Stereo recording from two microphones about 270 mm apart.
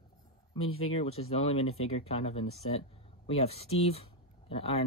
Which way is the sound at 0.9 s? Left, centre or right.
Left.